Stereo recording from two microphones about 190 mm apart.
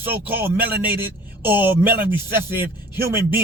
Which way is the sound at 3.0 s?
15° right (ahead or behind).